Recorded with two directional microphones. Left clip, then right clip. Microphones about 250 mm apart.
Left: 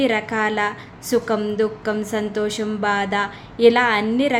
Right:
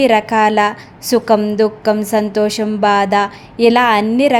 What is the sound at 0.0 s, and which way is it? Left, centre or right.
Speech, right.